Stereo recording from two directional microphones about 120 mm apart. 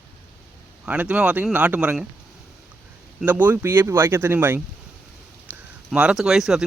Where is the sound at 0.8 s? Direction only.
15° right (ahead or behind).